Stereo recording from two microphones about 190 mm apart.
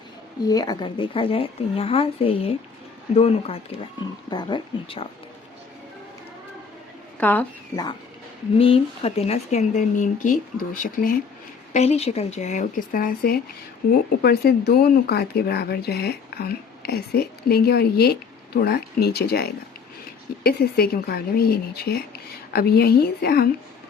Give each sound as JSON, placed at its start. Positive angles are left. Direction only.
{"t": 0.4, "sound": "a woman's voice", "side_deg": 20}
{"t": 7.2, "sound": "speech", "side_deg": 10}
{"t": 8.5, "sound": "speech", "side_deg": 30}
{"t": 11.7, "sound": "speech", "side_deg": 35}